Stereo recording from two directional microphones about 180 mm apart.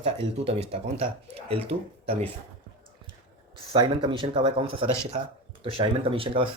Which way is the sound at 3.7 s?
25° right (ahead or behind).